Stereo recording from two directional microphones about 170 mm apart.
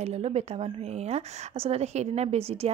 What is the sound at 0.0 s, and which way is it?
Speech, 40° right (ahead or behind).